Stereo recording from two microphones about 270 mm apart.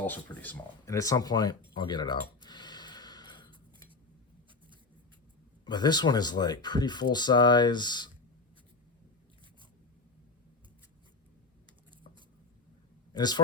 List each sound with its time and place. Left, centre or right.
0.0 s a sound: centre
5.6 s speech: centre
13.1 s speech: centre